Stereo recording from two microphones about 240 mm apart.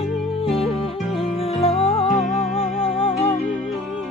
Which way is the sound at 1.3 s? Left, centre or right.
Left.